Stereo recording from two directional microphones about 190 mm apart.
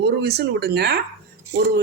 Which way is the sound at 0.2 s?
60° right (ahead or behind).